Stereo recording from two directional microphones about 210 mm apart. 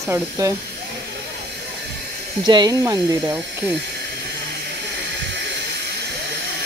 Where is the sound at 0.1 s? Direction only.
15° right (ahead or behind).